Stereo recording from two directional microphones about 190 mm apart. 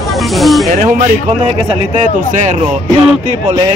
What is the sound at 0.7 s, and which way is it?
Speech, 45° right (ahead or behind).